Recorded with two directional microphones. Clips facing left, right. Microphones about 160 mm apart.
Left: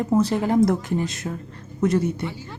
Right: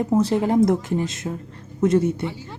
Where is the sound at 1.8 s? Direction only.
25° right (ahead or behind).